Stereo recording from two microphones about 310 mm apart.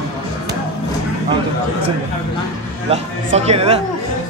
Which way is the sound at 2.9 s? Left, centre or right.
Centre.